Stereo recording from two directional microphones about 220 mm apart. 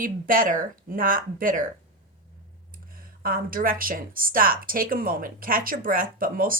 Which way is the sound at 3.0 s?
40° right (ahead or behind).